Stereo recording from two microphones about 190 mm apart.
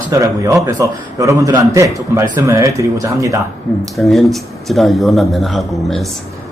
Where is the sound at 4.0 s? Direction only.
Centre (ahead or behind).